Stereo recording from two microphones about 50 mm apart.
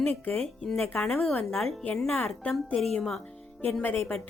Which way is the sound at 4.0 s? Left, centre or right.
Centre.